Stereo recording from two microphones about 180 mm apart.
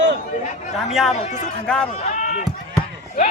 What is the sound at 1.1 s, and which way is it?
Speech, 40° left (ahead or behind).